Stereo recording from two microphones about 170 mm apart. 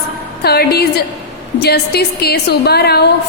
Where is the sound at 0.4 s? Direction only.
70° left (ahead or behind).